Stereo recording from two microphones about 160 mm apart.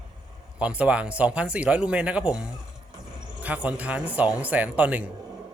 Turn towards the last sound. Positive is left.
turn(degrees=-10)  # may be behind; listen again after turning